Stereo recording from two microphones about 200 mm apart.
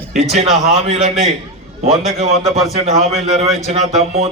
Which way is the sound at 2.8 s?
30° right (ahead or behind).